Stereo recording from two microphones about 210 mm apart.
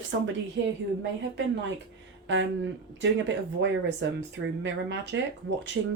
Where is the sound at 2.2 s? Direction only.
60° right (ahead or behind).